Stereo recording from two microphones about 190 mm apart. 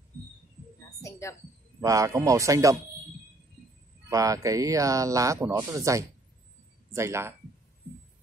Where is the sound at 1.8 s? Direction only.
15° right (ahead or behind).